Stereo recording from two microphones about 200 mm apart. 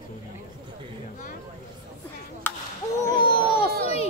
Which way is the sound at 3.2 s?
25° left (ahead or behind).